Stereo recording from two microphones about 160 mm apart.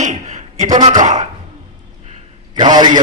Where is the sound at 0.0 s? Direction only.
50° right (ahead or behind).